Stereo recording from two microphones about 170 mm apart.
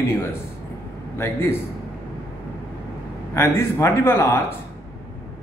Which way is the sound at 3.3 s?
15° left (ahead or behind).